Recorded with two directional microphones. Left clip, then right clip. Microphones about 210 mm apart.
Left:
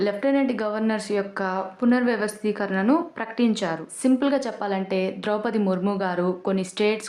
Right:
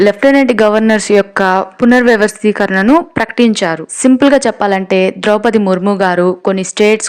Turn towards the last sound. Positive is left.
turn(degrees=-35)  # may be behind; listen again after turning